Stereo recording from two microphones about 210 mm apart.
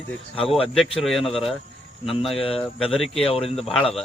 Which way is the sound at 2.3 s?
25° left (ahead or behind).